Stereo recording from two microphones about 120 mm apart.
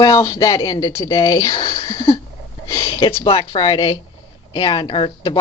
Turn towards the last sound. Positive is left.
turn(degrees=45)  # may be behind; listen again after turning